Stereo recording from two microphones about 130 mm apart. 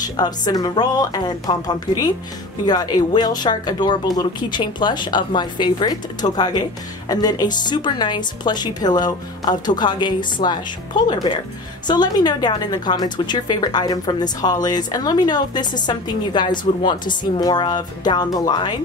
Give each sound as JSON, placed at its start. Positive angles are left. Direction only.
{"t": 0.0, "sound": "a woman's voice", "side_deg": 30}